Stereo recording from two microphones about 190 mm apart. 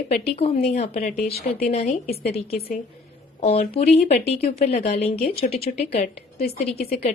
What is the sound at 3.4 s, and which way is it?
Speech, 35° left (ahead or behind).